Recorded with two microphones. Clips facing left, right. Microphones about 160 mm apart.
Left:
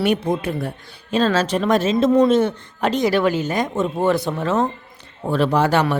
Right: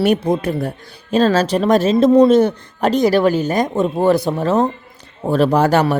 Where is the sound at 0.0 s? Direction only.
40° right (ahead or behind).